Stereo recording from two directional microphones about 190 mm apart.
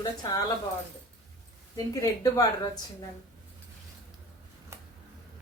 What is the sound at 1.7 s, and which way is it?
Speech, 20° left (ahead or behind).